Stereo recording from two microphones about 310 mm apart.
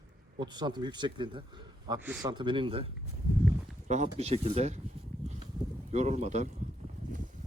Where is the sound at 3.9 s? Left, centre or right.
Right.